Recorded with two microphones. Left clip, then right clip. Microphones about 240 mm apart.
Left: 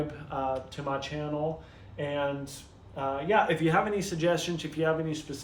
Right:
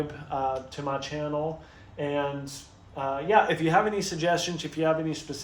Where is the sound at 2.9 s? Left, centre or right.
Centre.